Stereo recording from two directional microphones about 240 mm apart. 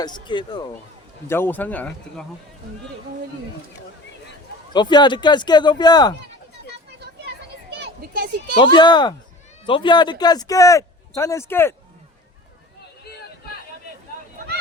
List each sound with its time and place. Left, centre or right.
0.0 s speech: centre
1.3 s speech: centre
4.7 s speech: centre
7.7 s a sound: right
8.5 s speech: centre